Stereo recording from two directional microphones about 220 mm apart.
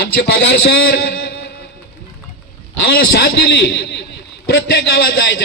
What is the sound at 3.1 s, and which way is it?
A man's voice, 50° left (ahead or behind).